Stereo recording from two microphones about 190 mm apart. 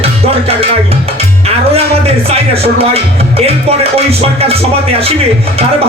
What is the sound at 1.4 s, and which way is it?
Speech, 30° right (ahead or behind).